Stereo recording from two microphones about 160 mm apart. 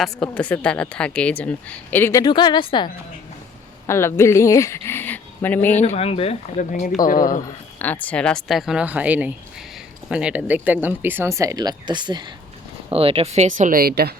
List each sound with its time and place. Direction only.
0.0 s a woman's voice: 5° left (ahead or behind); by 2.9 s 30° left (ahead or behind)
3.8 s speech: 15° left (ahead or behind)
5.8 s speech: 40° left (ahead or behind)
6.6 s speech: 55° left (ahead or behind)
7.4 s a woman's voice: 10° left (ahead or behind); by 14.2 s 75° right (ahead or behind)